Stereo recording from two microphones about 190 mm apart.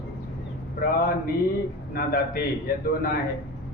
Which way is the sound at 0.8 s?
50° left (ahead or behind).